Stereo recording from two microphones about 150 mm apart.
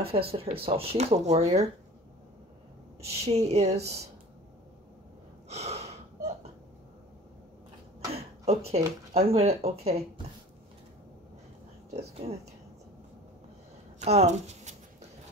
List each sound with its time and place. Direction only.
0.1 s speech: 40° right (ahead or behind)
3.1 s speech: 45° right (ahead or behind)
5.5 s gasp: 45° right (ahead or behind)
8.1 s speech: 45° right (ahead or behind)
12.2 s speech: 40° right (ahead or behind)
13.9 s a sound: 50° right (ahead or behind)